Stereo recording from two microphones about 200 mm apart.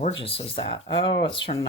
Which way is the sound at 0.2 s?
30° left (ahead or behind).